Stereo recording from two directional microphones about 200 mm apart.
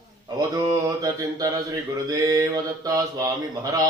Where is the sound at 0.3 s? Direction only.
15° right (ahead or behind).